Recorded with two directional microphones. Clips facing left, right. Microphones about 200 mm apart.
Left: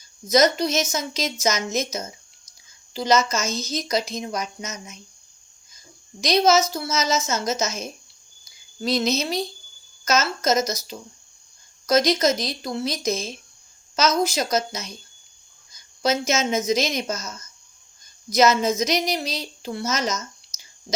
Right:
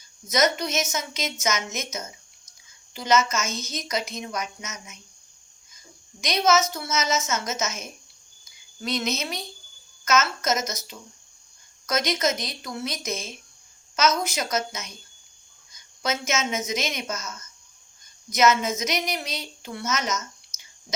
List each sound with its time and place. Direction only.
0.3 s a woman's voice: 35° left (ahead or behind)
6.1 s a woman's voice: 35° left (ahead or behind)
16.0 s a woman's voice: 35° left (ahead or behind)